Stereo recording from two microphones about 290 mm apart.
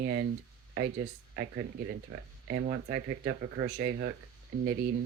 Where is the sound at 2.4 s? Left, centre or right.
Right.